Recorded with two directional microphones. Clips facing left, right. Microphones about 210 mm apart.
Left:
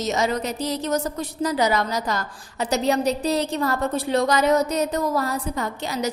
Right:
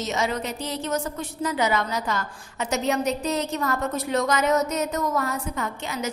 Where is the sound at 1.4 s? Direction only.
35° left (ahead or behind).